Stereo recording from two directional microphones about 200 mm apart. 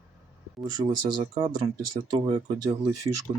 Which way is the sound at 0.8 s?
30° right (ahead or behind).